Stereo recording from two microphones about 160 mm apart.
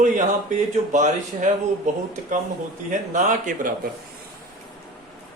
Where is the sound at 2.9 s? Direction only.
50° right (ahead or behind).